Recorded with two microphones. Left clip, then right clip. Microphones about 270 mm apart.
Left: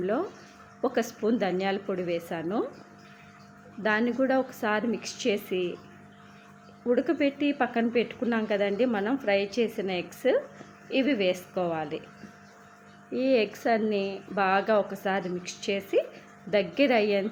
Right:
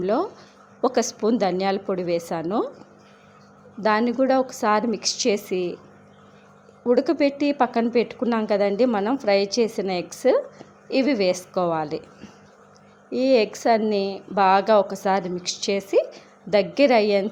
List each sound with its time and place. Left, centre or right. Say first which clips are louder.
0.0 s a woman's voice: right 6 dB; centre
3.8 s a woman's voice: right 6 dB; centre
6.8 s a woman's voice: right 6 dB; centre
13.1 s a woman's voice: right 6 dB; centre